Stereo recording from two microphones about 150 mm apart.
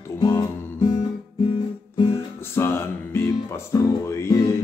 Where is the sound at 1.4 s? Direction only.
35° left (ahead or behind).